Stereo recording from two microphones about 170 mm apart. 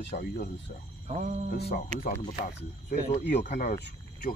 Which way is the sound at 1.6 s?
70° left (ahead or behind).